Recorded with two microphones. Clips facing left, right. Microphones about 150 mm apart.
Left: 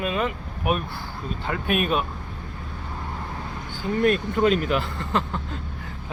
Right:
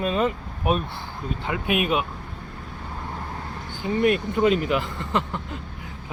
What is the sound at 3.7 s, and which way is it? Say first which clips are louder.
Speech: even; 15° right (ahead or behind).